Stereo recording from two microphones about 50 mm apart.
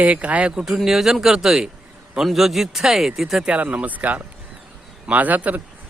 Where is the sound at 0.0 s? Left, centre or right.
Right.